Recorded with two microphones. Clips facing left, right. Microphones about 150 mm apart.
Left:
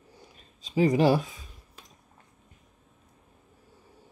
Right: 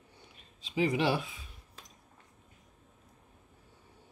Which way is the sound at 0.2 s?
40° left (ahead or behind).